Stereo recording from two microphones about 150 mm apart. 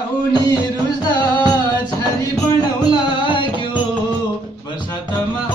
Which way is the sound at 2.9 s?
30° left (ahead or behind).